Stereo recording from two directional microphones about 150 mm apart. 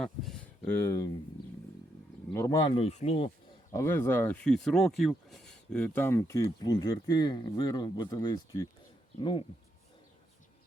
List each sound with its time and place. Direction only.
0.0 s a sound: centre (ahead or behind)
0.8 s speech: 20° left (ahead or behind)
2.3 s speech: 20° left (ahead or behind)
2.7 s speech: 45° left (ahead or behind)
3.7 s speech: 20° left (ahead or behind)